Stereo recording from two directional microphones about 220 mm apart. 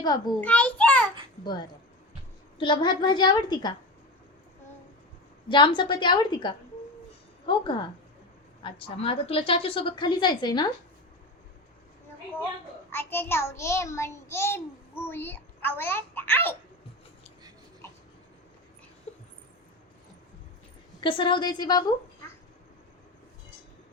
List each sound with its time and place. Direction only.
0.0 s a woman's voice: 20° left (ahead or behind)
0.4 s a sound: 5° left (ahead or behind)
2.6 s a woman's voice: 20° left (ahead or behind)
5.5 s a woman's voice: 20° left (ahead or behind)
12.9 s a child's voice: 10° left (ahead or behind)
19.1 s a sound: 30° left (ahead or behind)
21.0 s a woman's voice: 20° left (ahead or behind)